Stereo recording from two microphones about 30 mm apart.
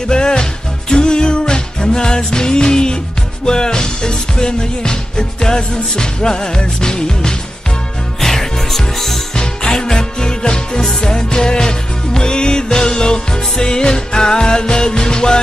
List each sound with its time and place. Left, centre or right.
0.1 s music: left
8.2 s music: centre
9.4 s music: left